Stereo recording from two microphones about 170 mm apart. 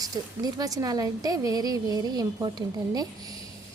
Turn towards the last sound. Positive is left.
turn(degrees=-20)  # may be behind; listen again after turning